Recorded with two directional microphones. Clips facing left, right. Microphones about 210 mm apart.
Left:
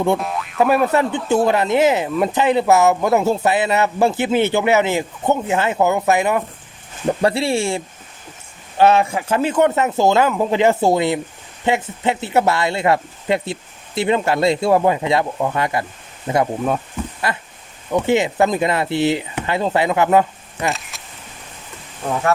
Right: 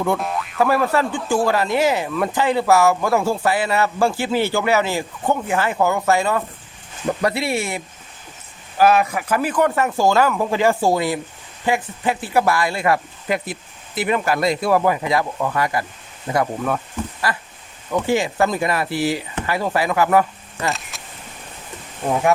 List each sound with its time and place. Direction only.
0.2 s boing: centre (ahead or behind)
0.6 s speech: 20° left (ahead or behind)
7.2 s speech: 30° left (ahead or behind)
8.8 s speech: 25° left (ahead or behind)
20.7 s vehicle: centre (ahead or behind)